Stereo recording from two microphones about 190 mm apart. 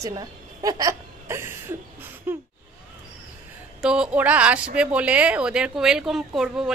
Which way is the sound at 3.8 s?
5° right (ahead or behind).